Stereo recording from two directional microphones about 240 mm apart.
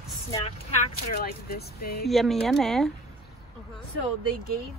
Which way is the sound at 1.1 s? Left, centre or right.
Left.